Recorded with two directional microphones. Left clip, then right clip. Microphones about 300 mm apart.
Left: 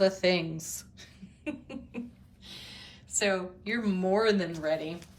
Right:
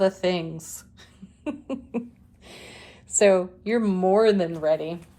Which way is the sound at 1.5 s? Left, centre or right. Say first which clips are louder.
Right 7 dB; centre.